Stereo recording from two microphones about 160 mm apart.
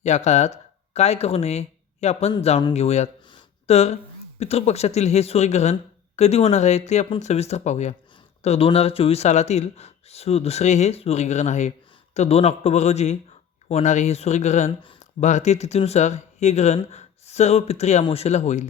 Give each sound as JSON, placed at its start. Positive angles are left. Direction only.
{"t": 0.0, "sound": "speech", "side_deg": 45}